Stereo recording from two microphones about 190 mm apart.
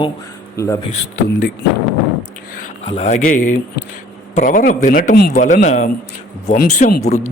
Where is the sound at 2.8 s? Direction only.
35° left (ahead or behind); by 5.4 s 55° left (ahead or behind).